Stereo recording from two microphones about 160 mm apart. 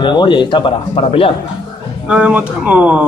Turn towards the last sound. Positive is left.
turn(degrees=-10)  # may be behind; listen again after turning